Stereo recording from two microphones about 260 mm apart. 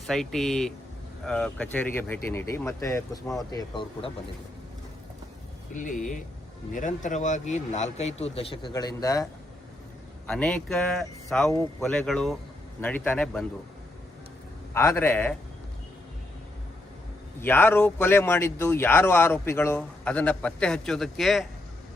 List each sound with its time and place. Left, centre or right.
0.1 s a man's voice: centre
5.7 s a man's voice: left; by 9.2 s centre
10.2 s speech: centre
14.7 s speech: centre
17.4 s speech: centre